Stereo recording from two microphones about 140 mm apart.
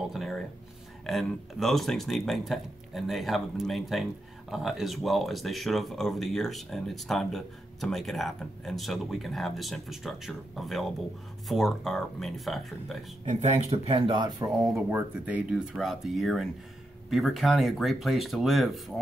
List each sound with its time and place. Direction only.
0.1 s speech: centre (ahead or behind)
13.2 s speech: 55° right (ahead or behind); by 14.5 s 30° right (ahead or behind)
14.7 s speech: 10° right (ahead or behind)